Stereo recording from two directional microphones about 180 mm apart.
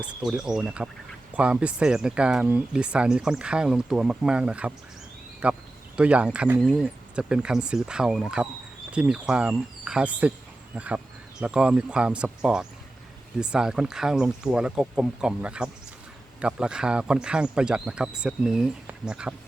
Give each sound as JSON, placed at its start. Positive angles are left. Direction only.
{"t": 0.3, "sound": "speech", "side_deg": -5}